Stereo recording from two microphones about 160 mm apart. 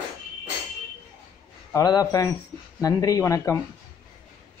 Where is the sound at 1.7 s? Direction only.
25° left (ahead or behind).